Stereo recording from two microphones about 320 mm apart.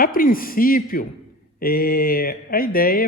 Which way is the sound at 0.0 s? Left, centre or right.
Left.